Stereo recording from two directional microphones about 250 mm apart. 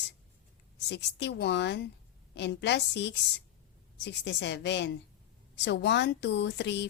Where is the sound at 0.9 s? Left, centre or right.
Left.